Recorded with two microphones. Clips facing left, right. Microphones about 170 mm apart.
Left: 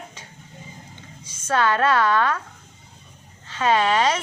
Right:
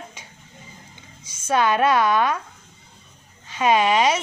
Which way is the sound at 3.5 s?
15° right (ahead or behind).